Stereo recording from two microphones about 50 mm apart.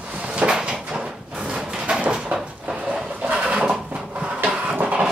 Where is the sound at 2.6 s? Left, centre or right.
Centre.